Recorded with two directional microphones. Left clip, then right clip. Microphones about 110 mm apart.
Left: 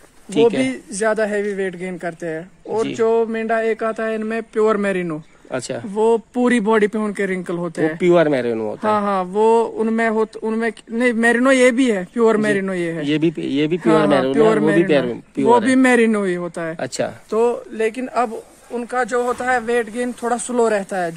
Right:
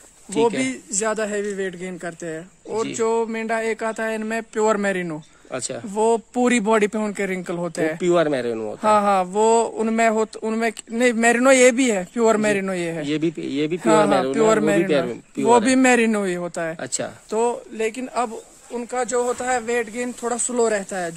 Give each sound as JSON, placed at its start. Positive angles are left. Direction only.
{"t": 0.6, "sound": "a man's voice", "side_deg": -40}
{"t": 3.0, "sound": "speech", "side_deg": -55}
{"t": 5.9, "sound": "speech", "side_deg": -60}
{"t": 8.0, "sound": "speech", "side_deg": 5}
{"t": 8.8, "sound": "speech", "side_deg": -80}
{"t": 13.0, "sound": "speech", "side_deg": 10}
{"t": 13.7, "sound": "speech", "side_deg": -70}
{"t": 14.9, "sound": "speech", "side_deg": 5}
{"t": 15.6, "sound": "speech", "side_deg": -60}
{"t": 16.8, "sound": "speech", "side_deg": 10}
{"t": 17.3, "sound": "speech", "side_deg": -55}
{"t": 17.7, "sound": "a man's voice", "side_deg": -30}
{"t": 18.8, "sound": "speech", "side_deg": -15}